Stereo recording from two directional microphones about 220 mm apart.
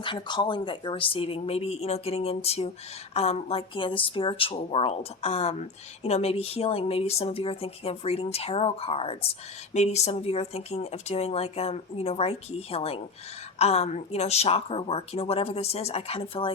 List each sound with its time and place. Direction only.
0.0 s speech: 20° left (ahead or behind)